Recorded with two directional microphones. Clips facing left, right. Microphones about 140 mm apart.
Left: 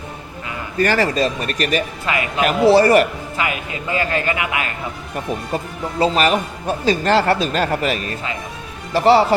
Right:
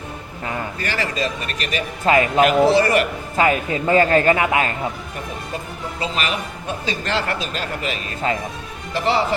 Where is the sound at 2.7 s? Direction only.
40° left (ahead or behind).